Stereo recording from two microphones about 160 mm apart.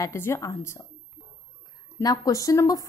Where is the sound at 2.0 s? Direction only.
20° left (ahead or behind).